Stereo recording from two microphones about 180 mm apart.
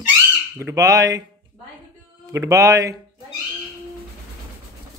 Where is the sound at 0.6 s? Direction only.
15° right (ahead or behind).